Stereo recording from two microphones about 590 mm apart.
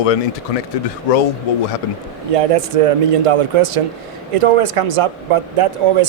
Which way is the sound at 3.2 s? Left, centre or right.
Right.